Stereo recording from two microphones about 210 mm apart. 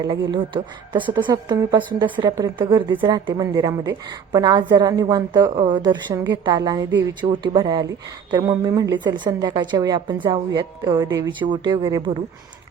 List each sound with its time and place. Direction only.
0.0 s speech: 20° right (ahead or behind)